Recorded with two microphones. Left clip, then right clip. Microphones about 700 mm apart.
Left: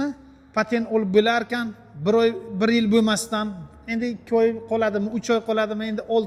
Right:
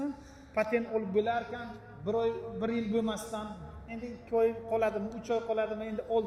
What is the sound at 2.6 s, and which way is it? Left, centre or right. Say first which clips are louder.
Speech: left 13 dB; left.